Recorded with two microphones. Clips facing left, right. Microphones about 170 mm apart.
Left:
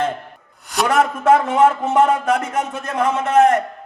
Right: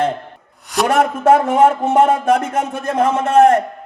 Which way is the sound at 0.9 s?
30° right (ahead or behind).